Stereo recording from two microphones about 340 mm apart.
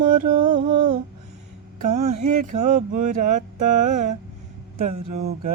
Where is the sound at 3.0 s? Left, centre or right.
Right.